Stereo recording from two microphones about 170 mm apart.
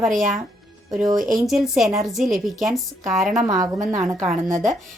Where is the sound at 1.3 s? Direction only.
Centre (ahead or behind).